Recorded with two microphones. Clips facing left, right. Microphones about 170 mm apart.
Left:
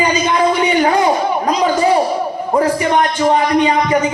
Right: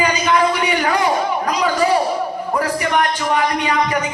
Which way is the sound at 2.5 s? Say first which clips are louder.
Left 5 dB; 25° left (ahead or behind).